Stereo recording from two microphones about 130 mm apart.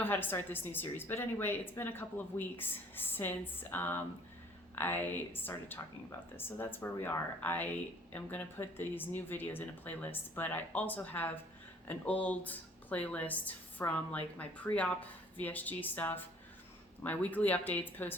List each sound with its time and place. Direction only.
0.0 s a woman's voice: 15° left (ahead or behind)